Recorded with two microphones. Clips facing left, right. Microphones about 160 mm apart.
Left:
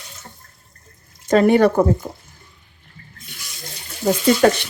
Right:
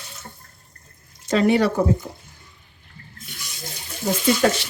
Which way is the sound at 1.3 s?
50° left (ahead or behind).